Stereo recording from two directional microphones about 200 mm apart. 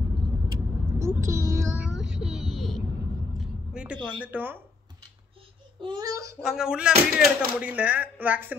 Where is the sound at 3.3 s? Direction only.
5° right (ahead or behind).